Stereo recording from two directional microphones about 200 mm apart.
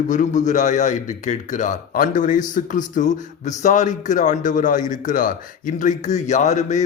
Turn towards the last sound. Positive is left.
turn(degrees=35)  # may be behind; listen again after turning